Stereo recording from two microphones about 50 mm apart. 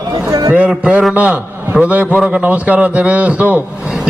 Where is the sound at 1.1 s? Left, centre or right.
Right.